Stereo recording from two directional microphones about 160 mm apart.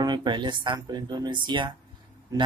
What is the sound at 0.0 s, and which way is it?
Speech, 30° right (ahead or behind).